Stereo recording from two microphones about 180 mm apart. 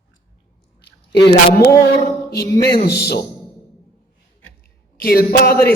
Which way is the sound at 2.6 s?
60° left (ahead or behind).